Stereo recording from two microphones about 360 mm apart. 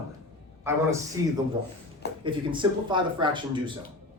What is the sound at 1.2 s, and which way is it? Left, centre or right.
Speech, centre.